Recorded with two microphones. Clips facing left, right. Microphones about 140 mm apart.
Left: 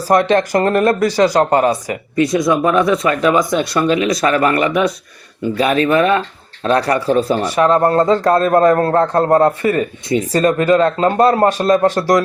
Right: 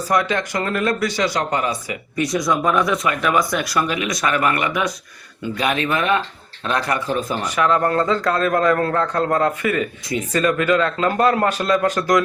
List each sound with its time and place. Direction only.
0.1 s speech: 35° left (ahead or behind)
2.2 s speech: 25° left (ahead or behind)